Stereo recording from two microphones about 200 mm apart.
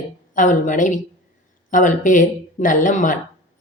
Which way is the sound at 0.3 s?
40° left (ahead or behind).